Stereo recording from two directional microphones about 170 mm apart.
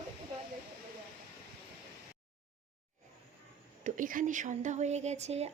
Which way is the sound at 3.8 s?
50° right (ahead or behind).